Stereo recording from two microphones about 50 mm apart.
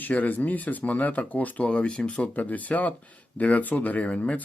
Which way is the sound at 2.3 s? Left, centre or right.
Left.